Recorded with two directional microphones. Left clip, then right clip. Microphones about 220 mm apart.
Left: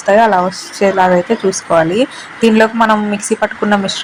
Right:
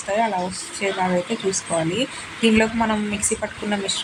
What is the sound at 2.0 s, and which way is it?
A woman's voice, 15° left (ahead or behind).